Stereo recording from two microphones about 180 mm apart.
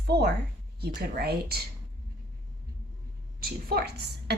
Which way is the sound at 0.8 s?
55° right (ahead or behind).